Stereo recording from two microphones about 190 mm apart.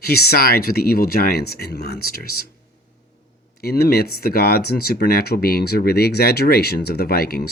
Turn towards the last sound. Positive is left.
turn(degrees=55)  # may be behind; listen again after turning